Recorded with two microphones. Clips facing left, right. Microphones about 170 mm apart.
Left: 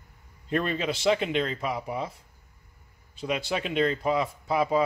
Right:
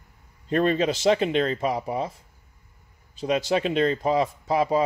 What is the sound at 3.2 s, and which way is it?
Speech, 35° right (ahead or behind).